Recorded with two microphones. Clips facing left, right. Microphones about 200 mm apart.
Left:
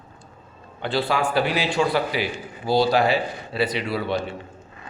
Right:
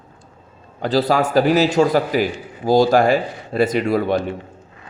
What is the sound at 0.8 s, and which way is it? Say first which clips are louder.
A man's voice: right 6 dB; 40° right (ahead or behind).